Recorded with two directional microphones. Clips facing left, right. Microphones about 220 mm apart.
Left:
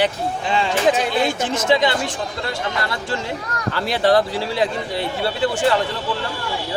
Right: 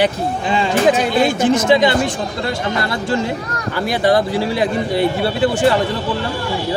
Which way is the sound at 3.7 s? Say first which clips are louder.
Right 2 dB; 15° right (ahead or behind).